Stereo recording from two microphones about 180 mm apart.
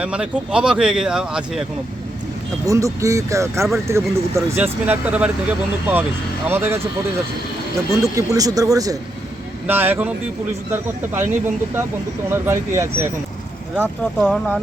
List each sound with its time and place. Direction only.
0.0 s speech: 5° right (ahead or behind)
2.6 s speech: 15° right (ahead or behind)
8.1 s speech: 20° right (ahead or behind)
12.3 s speech: 15° right (ahead or behind)
14.3 s speech: 5° left (ahead or behind)